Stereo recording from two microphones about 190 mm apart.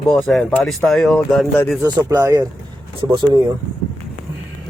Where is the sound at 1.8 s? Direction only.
20° right (ahead or behind).